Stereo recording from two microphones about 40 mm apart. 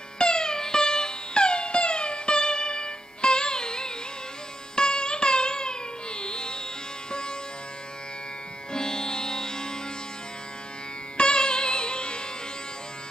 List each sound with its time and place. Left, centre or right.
0.2 s music: centre
8.7 s music: centre
11.1 s music: left